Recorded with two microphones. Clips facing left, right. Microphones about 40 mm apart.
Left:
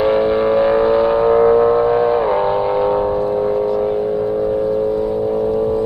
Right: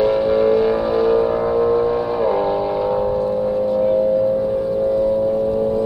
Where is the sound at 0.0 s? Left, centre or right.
Left.